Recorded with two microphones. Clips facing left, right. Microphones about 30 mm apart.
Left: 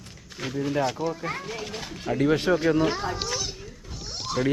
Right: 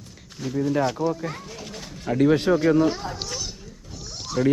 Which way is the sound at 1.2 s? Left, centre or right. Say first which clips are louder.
Left 2 dB; left.